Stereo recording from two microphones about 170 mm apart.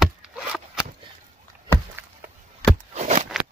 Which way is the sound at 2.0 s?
10° right (ahead or behind).